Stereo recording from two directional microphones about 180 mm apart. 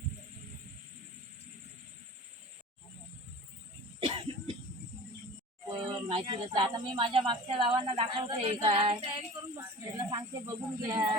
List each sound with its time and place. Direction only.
4.0 s cough: 30° right (ahead or behind)
5.6 s speech: 25° right (ahead or behind)